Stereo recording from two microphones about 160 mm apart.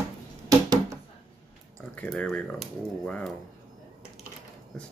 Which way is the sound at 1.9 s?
5° left (ahead or behind).